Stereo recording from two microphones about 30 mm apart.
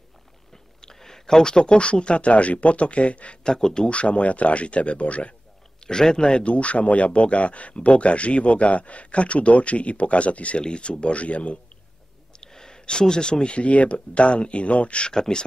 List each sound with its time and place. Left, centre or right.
0.7 s a sound: centre
1.4 s speech: left
3.4 s speech: left
3.9 s speech: left
5.8 s speech: left
10.6 s speech: left
12.3 s a sound: left
13.0 s speech: left
13.6 s speech: left
15.0 s speech: left